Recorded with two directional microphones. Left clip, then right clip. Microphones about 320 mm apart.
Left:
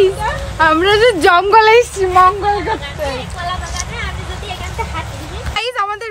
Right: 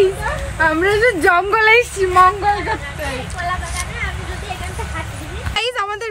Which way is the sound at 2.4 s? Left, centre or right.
Centre.